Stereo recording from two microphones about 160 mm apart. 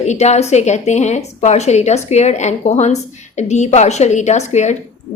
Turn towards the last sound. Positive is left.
turn(degrees=45)  # may be behind; listen again after turning